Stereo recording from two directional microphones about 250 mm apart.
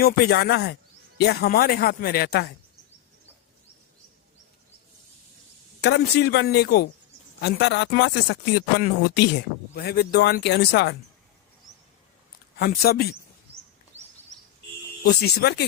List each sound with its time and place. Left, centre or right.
0.0 s speech: left
5.8 s speech: left
12.5 s speech: left
15.0 s speech: left